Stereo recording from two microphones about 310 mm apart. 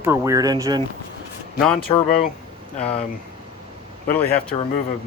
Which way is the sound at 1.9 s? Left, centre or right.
Centre.